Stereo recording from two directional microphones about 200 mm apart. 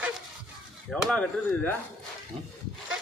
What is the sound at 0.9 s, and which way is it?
Speech, centre (ahead or behind).